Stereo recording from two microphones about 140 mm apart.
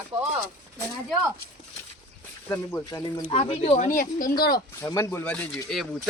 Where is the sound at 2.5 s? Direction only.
20° left (ahead or behind).